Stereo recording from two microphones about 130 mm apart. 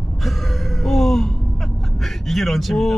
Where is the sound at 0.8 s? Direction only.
5° left (ahead or behind).